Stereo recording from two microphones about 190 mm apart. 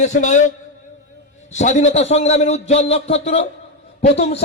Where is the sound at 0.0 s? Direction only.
40° left (ahead or behind).